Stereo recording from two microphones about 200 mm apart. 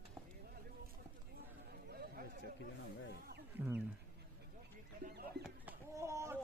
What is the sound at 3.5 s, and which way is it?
Speech, 10° right (ahead or behind).